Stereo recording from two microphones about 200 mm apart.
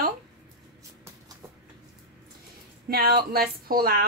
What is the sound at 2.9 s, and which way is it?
Speech, 50° right (ahead or behind).